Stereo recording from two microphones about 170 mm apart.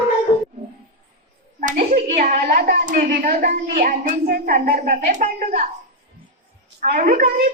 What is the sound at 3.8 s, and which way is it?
Speech, 45° right (ahead or behind).